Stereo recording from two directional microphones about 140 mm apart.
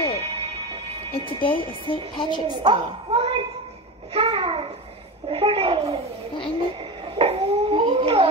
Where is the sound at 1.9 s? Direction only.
35° left (ahead or behind).